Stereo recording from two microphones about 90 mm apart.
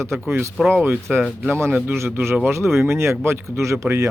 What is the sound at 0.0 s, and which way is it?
Speech, 30° right (ahead or behind).